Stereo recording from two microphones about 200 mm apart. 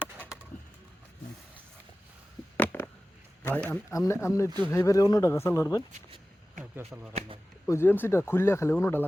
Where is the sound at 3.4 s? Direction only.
10° left (ahead or behind).